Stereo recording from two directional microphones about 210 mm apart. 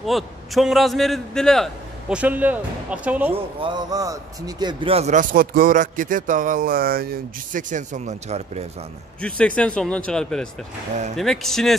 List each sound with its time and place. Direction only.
0.0 s a man's voice: centre (ahead or behind)
3.6 s a man's voice: 20° right (ahead or behind)
9.6 s a man's voice: 5° left (ahead or behind)